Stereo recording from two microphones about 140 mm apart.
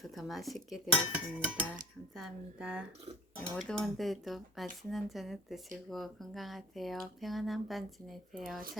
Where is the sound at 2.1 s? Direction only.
Centre (ahead or behind).